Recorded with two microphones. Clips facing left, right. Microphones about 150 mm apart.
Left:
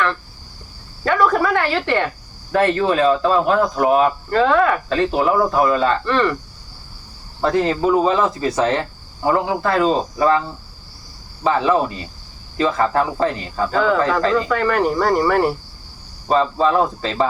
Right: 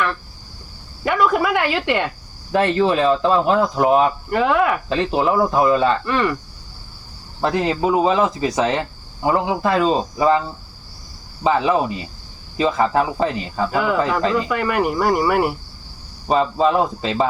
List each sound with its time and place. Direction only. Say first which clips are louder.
1.0 s speech: left 1 dB; 15° right (ahead or behind)
7.4 s speech: left 2 dB; 15° right (ahead or behind)
11.4 s speech: even; 15° right (ahead or behind)